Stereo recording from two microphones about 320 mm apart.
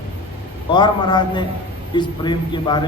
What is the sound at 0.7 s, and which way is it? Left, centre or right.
Mantra, centre.